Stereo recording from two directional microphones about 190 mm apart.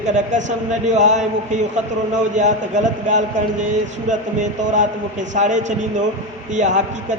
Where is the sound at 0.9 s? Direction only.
40° right (ahead or behind).